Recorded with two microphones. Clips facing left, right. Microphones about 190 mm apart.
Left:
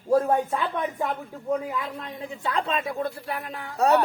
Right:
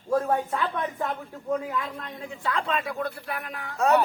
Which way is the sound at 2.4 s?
25° left (ahead or behind).